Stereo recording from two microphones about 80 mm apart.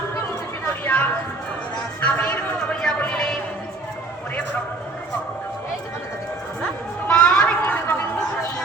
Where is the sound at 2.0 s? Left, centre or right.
Centre.